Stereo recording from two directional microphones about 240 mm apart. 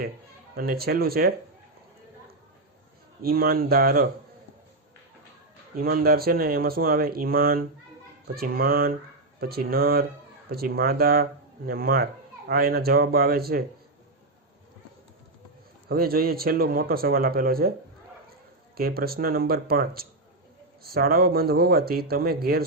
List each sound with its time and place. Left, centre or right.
0.5 s speech: right
3.2 s speech: right
5.7 s speech: right
15.9 s speech: right
18.8 s speech: right